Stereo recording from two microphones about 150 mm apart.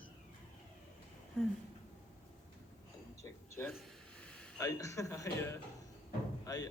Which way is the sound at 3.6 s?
5° left (ahead or behind).